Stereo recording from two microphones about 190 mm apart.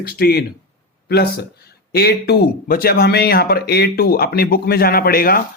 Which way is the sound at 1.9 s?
55° left (ahead or behind).